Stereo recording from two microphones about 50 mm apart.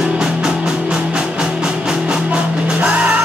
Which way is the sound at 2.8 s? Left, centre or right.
Right.